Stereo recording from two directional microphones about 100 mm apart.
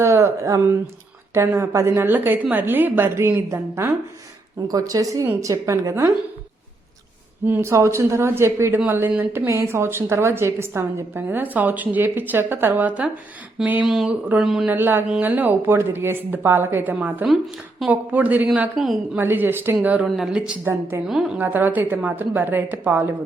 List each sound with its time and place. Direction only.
0.0 s a woman's voice: 30° right (ahead or behind)
4.7 s a woman's voice: 35° right (ahead or behind)
5.2 s a woman's voice: 20° right (ahead or behind)
5.5 s a woman's voice: 35° right (ahead or behind)
7.4 s a woman's voice: 25° right (ahead or behind)
13.8 s speech: 5° right (ahead or behind)
14.7 s a woman's voice: 20° right (ahead or behind)
18.8 s speech: centre (ahead or behind)
19.1 s a woman's voice: 20° right (ahead or behind)
20.1 s speech: centre (ahead or behind)
20.7 s a woman's voice: 20° right (ahead or behind)
21.1 s speech: 5° right (ahead or behind)
21.3 s a woman's voice: 20° right (ahead or behind)